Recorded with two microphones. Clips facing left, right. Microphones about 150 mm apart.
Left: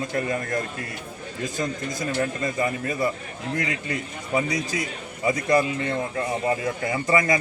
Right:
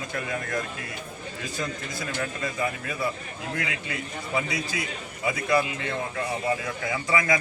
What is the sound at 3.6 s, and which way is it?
Speech, 40° left (ahead or behind).